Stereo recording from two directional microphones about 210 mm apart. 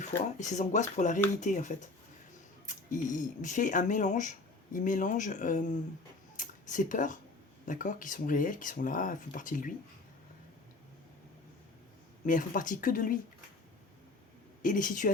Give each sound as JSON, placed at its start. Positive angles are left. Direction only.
{"t": 0.3, "sound": "speech", "side_deg": 35}
{"t": 12.2, "sound": "speech", "side_deg": 40}
{"t": 14.6, "sound": "speech", "side_deg": 40}